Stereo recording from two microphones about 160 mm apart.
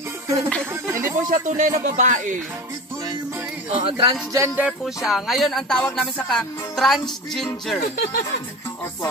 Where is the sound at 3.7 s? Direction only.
35° right (ahead or behind).